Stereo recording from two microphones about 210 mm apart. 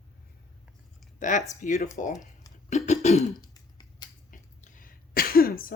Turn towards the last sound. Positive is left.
turn(degrees=45)  # may be behind; listen again after turning